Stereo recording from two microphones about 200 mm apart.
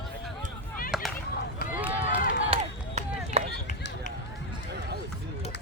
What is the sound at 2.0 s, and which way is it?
Run, 45° left (ahead or behind).